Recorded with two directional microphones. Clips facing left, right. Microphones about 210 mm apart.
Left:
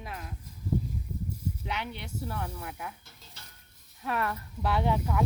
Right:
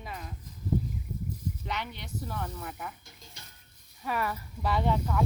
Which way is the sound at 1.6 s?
10° left (ahead or behind).